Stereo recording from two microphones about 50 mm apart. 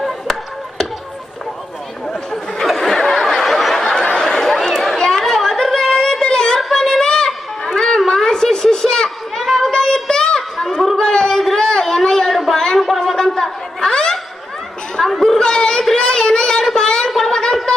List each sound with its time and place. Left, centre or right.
0.0 s chop: centre
2.6 s snicker: centre
4.2 s a sound: centre
13.1 s chatter: centre
15.4 s chatter: centre
15.8 s child singing: centre
16.7 s a sound: centre